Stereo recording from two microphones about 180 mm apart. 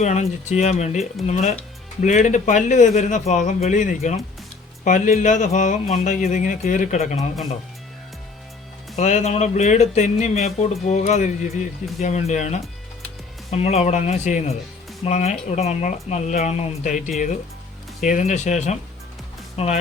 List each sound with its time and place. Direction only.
0.0 s speech: 40° left (ahead or behind)
9.0 s speech: 40° left (ahead or behind)